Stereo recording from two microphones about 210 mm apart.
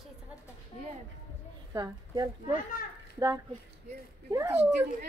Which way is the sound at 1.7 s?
20° right (ahead or behind).